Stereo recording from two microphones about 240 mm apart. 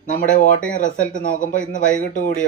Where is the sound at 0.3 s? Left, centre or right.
Left.